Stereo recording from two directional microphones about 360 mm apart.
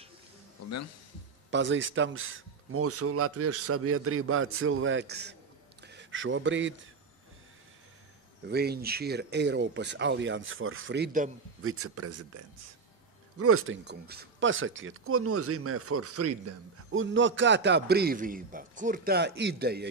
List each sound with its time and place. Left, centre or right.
1.5 s speech: right
8.5 s speech: right
11.7 s speech: right
13.4 s speech: right